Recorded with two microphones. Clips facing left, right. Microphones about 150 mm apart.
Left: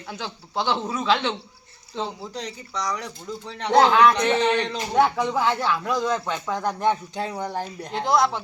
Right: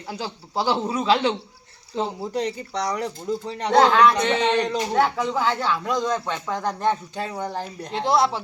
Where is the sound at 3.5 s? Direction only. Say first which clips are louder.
Right 3 dB; 45° right (ahead or behind).